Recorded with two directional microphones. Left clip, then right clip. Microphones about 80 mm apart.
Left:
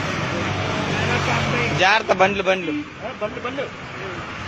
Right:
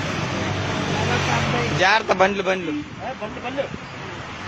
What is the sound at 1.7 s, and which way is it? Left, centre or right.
Speech, right.